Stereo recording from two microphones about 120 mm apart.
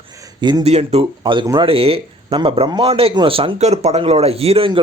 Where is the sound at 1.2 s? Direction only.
45° right (ahead or behind).